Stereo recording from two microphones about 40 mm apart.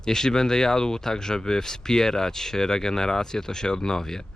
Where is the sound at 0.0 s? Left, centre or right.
Centre.